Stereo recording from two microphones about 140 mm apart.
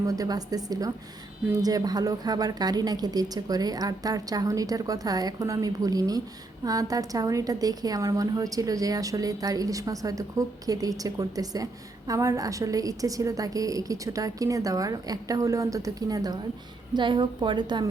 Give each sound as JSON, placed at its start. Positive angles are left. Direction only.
{"t": 0.1, "sound": "a woman's voice", "side_deg": -25}